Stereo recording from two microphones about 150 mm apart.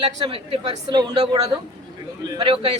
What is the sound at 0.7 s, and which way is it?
Speech, 25° right (ahead or behind).